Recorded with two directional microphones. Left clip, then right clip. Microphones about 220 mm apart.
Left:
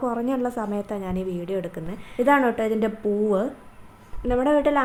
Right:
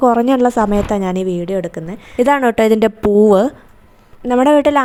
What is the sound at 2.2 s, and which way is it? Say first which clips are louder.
Speech: right 8 dB; 45° right (ahead or behind).